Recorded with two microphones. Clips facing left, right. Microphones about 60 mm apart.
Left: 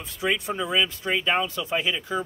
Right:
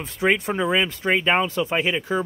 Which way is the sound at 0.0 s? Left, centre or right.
Right.